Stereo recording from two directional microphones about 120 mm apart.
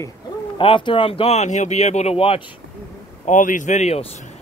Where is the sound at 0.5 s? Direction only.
45° left (ahead or behind).